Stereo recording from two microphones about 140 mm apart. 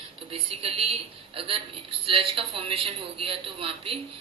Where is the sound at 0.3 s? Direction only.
45° right (ahead or behind).